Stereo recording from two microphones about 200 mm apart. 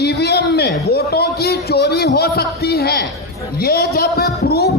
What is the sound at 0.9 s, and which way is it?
A man's voice, 55° left (ahead or behind).